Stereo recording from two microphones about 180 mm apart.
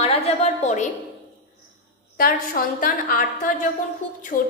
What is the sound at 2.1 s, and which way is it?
A woman's voice, 50° left (ahead or behind).